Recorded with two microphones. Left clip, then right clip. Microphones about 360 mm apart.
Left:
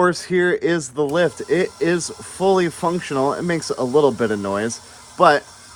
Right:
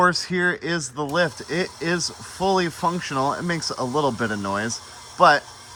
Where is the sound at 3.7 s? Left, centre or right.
Left.